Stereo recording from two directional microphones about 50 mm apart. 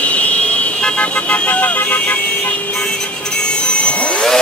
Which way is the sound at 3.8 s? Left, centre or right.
Left.